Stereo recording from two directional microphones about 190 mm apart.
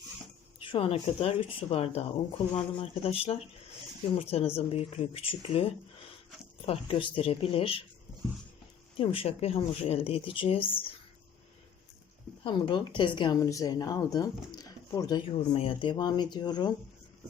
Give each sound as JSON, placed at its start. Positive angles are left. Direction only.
{"t": 0.6, "sound": "speech", "side_deg": 30}
{"t": 6.7, "sound": "speech", "side_deg": 30}
{"t": 9.0, "sound": "speech", "side_deg": 30}
{"t": 12.4, "sound": "speech", "side_deg": 25}